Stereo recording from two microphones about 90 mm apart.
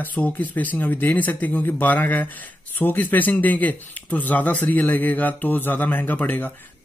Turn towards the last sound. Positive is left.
turn(degrees=20)  # may be behind; listen again after turning